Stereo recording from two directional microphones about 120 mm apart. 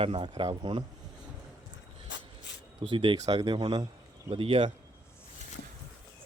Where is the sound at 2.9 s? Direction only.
45° right (ahead or behind).